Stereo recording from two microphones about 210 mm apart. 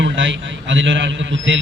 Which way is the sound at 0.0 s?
60° right (ahead or behind).